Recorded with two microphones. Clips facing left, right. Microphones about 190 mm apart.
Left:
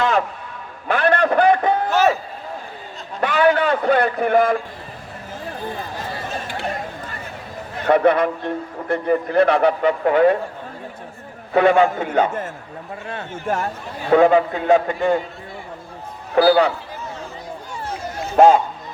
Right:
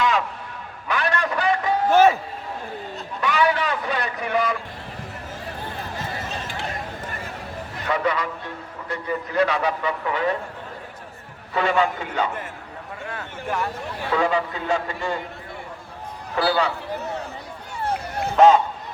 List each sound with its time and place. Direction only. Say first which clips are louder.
0.0 s a sound: left 3 dB; 55° left (ahead or behind)
3.2 s a sound: left 5 dB; 55° left (ahead or behind)
7.9 s a man's voice: left 9 dB; 55° left (ahead or behind)
11.5 s a man's voice: left 7 dB; 55° left (ahead or behind)
14.1 s a man's voice: left 9 dB; 55° left (ahead or behind)
16.3 s a man's voice: left 8 dB; 50° left (ahead or behind)
16.9 s a sound: right 3 dB; 65° right (ahead or behind)
17.8 s run: right 3 dB; 60° right (ahead or behind)
18.3 s a man's voice: left 2 dB; 50° left (ahead or behind)